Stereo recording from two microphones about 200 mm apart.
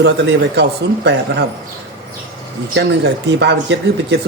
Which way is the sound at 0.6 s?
60° right (ahead or behind).